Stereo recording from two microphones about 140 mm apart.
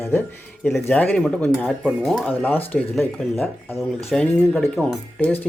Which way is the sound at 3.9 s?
5° left (ahead or behind).